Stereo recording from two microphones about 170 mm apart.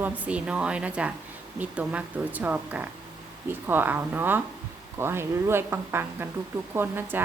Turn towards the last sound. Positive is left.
turn(degrees=-10)  # may be behind; listen again after turning